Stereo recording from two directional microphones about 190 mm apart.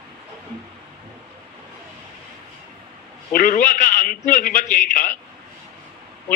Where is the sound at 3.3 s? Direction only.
45° left (ahead or behind).